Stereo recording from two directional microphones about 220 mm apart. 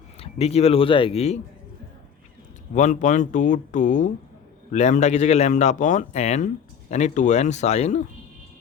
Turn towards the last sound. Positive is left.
turn(degrees=30)  # may be behind; listen again after turning